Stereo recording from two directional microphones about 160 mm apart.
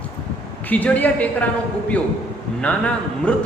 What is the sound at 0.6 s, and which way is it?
Speech, 10° left (ahead or behind).